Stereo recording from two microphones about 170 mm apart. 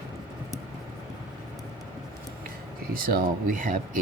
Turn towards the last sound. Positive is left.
turn(degrees=-50)  # may be behind; listen again after turning